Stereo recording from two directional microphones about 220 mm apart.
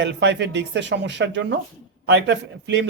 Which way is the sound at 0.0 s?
55° right (ahead or behind).